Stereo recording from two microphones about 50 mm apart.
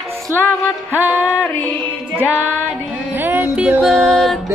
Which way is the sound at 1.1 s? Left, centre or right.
Right.